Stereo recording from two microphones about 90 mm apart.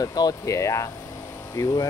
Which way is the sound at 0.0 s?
45° left (ahead or behind).